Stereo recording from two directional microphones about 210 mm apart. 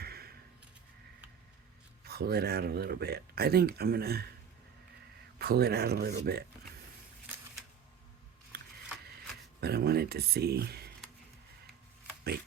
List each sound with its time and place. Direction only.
0.0 s a sound: 45° right (ahead or behind)
2.0 s speech: 50° right (ahead or behind)
5.4 s speech: 50° right (ahead or behind)
9.6 s speech: 50° right (ahead or behind)